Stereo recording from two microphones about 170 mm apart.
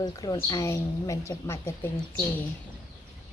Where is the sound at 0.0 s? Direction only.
20° left (ahead or behind).